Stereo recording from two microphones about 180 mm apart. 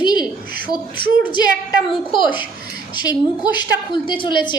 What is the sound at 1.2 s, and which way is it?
A woman's voice, 25° left (ahead or behind).